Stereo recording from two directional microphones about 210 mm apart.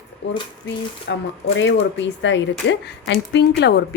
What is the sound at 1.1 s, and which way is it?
Speech, 55° left (ahead or behind).